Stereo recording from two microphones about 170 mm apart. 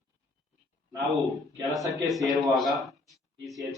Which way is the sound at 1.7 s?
Centre (ahead or behind).